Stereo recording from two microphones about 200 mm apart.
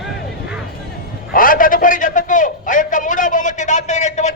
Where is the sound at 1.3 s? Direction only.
45° left (ahead or behind).